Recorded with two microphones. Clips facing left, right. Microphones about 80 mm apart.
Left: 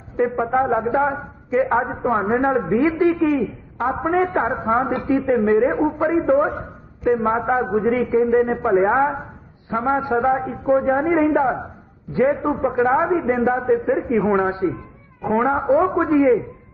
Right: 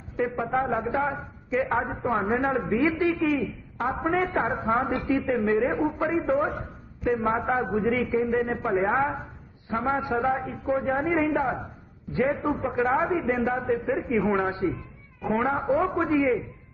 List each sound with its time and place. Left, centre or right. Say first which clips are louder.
0.2 s a woman's voice: left 7 dB; left